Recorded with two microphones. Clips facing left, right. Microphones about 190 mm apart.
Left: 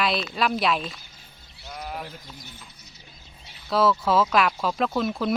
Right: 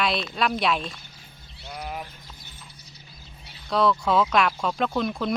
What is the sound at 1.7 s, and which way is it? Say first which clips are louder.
Sheep: right 1 dB; 5° right (ahead or behind).